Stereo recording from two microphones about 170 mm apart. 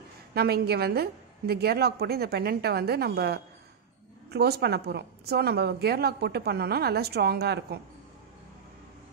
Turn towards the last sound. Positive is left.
turn(degrees=-70)  # may be behind; listen again after turning